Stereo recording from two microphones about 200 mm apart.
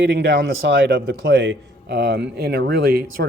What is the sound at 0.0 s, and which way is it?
Speech, 55° right (ahead or behind).